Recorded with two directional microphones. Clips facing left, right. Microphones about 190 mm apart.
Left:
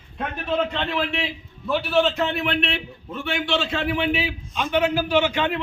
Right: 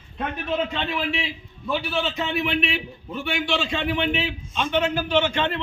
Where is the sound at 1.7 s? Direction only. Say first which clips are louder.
Left 5 dB; centre (ahead or behind).